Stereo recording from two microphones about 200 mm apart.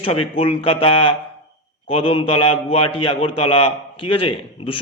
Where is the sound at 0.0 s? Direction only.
25° left (ahead or behind).